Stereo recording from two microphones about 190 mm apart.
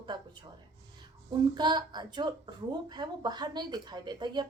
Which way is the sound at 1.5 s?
20° right (ahead or behind).